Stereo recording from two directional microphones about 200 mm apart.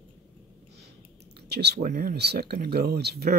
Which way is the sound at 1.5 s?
55° right (ahead or behind).